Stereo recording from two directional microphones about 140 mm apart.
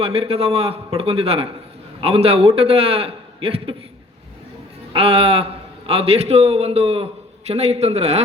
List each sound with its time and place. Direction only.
0.0 s a man's voice: 45° right (ahead or behind)
4.9 s a man's voice: 45° right (ahead or behind)